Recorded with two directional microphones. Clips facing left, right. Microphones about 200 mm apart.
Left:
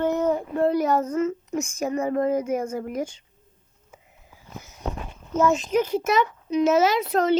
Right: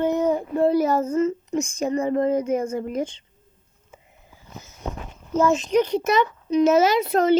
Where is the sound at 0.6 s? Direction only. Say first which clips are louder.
Right 2 dB; 5° right (ahead or behind).